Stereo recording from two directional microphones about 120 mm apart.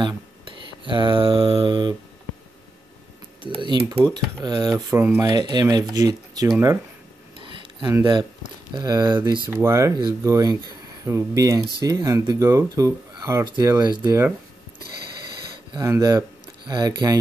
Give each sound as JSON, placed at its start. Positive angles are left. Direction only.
{"t": 0.0, "sound": "a sound", "side_deg": -40}
{"t": 3.4, "sound": "typing", "side_deg": -45}
{"t": 4.4, "sound": "speech", "side_deg": -30}
{"t": 4.9, "sound": "speech", "side_deg": -20}
{"t": 5.2, "sound": "speech", "side_deg": -35}
{"t": 7.3, "sound": "a sound", "side_deg": -45}
{"t": 8.0, "sound": "speech", "side_deg": -40}
{"t": 9.5, "sound": "speech", "side_deg": -20}
{"t": 15.8, "sound": "speech", "side_deg": -25}